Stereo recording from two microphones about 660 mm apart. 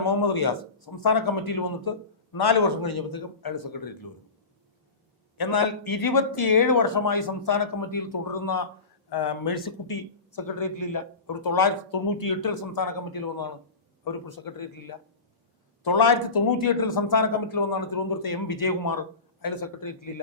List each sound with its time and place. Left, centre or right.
0.0 s a man's voice: left
5.4 s speech: left
10.4 s speech: left